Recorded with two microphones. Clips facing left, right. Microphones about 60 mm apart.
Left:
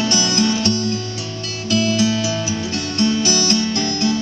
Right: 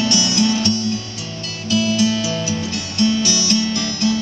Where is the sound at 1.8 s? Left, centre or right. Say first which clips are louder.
Even; left.